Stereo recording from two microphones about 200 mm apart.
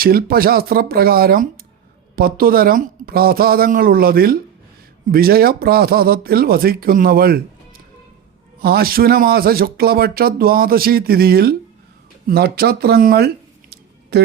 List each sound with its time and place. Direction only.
0.0 s speech: 50° right (ahead or behind)
8.6 s speech: 50° right (ahead or behind)